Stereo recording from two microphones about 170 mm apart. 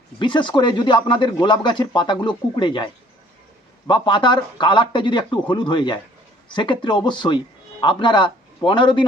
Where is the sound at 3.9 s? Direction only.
25° left (ahead or behind).